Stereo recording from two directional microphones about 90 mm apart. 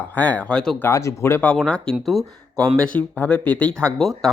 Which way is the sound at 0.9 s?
35° left (ahead or behind).